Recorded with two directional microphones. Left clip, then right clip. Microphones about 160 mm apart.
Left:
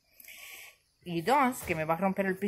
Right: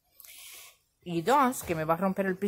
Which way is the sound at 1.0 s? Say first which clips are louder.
Right 2 dB; 15° right (ahead or behind).